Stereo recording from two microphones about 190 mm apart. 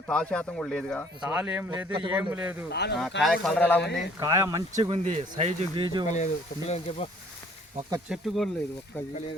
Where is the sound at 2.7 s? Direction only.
60° left (ahead or behind).